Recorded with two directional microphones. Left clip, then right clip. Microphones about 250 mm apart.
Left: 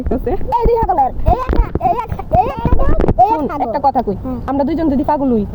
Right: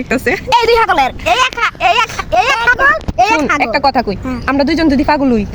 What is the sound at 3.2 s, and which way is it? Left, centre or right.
Speech, right.